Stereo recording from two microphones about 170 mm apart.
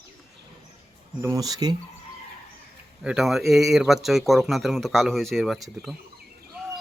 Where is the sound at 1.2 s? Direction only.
20° right (ahead or behind).